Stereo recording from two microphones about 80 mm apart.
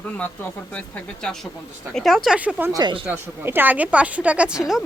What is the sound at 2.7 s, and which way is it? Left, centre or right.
Speech, right.